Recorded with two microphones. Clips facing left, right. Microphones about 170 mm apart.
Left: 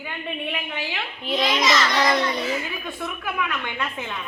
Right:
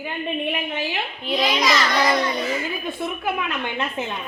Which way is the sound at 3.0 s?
25° right (ahead or behind).